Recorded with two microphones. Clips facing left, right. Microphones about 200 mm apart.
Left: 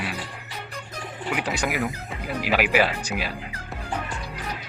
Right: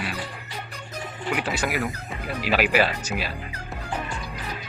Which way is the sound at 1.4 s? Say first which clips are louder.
Left 1 dB; 15° left (ahead or behind).